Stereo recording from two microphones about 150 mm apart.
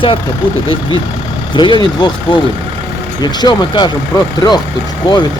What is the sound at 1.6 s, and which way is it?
Speech, 30° left (ahead or behind).